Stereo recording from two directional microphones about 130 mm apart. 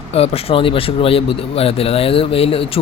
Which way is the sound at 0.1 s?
50° left (ahead or behind).